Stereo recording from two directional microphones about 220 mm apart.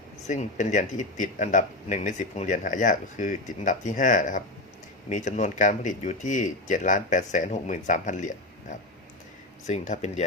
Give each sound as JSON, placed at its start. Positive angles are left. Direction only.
{"t": 0.2, "sound": "speech", "side_deg": 30}
{"t": 9.6, "sound": "speech", "side_deg": 35}